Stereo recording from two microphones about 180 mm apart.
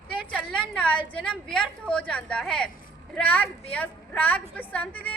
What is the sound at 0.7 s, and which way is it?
A woman's voice, 5° left (ahead or behind).